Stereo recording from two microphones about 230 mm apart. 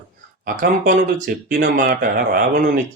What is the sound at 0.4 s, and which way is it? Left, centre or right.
Speech, right.